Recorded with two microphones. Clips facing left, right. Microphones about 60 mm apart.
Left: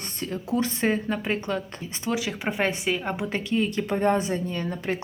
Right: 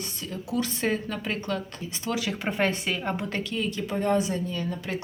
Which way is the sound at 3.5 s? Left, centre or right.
Left.